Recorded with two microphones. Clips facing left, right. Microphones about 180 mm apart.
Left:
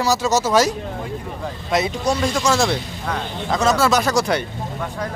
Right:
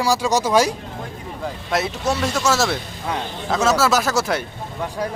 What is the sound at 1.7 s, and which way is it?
Speech, centre (ahead or behind).